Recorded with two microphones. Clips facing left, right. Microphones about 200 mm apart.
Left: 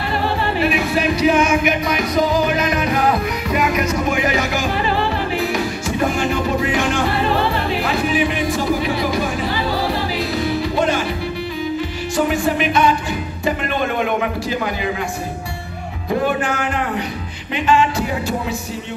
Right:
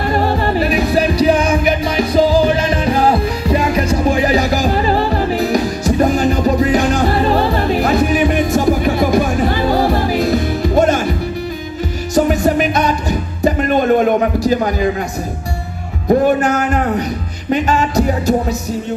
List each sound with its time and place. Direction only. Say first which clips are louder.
0.1 s music: right 4 dB; 40° right (ahead or behind)
12.2 s music: right 5 dB; 40° right (ahead or behind)
16.1 s speech: right 7 dB; 40° right (ahead or behind)